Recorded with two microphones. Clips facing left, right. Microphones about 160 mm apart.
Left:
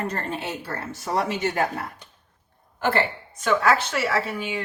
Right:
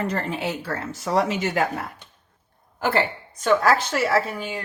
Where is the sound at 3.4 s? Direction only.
35° right (ahead or behind).